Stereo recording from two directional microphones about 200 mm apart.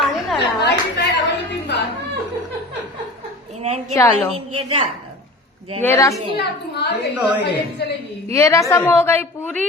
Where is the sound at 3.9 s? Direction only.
15° left (ahead or behind).